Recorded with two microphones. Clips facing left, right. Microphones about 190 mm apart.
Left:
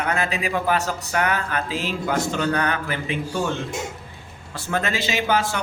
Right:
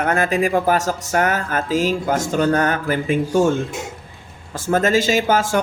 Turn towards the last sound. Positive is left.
turn(degrees=-45)  # may be behind; listen again after turning